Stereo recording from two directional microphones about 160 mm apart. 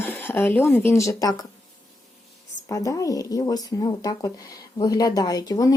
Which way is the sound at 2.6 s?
20° left (ahead or behind).